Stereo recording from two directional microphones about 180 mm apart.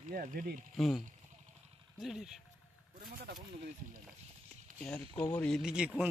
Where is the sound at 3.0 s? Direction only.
55° right (ahead or behind).